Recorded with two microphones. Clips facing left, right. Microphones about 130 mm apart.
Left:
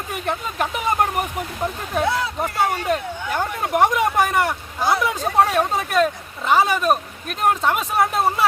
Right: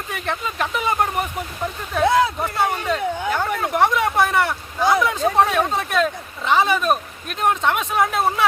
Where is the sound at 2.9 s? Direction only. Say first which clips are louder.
Left 1 dB; 50° left (ahead or behind).